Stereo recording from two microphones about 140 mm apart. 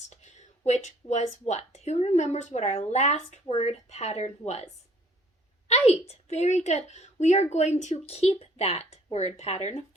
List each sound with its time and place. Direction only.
0.1 s a woman's voice: 55° left (ahead or behind)